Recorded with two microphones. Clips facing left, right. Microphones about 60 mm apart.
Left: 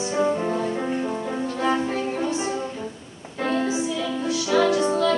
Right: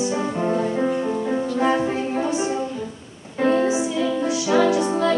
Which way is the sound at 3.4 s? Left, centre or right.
Centre.